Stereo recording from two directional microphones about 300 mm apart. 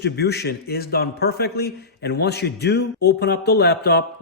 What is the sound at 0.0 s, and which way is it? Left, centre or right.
A man's voice, left.